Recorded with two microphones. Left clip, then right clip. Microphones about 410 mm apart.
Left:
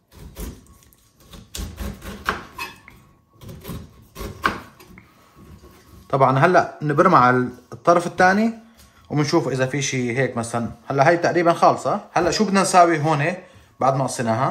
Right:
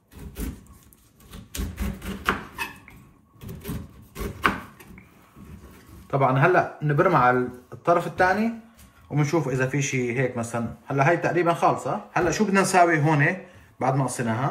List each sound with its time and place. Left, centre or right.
6.0 s speech: centre